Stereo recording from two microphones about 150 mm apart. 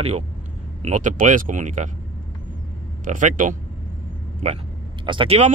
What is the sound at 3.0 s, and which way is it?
Speech, 60° right (ahead or behind).